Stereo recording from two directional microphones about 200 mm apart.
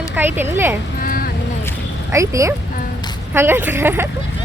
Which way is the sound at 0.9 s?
45° left (ahead or behind).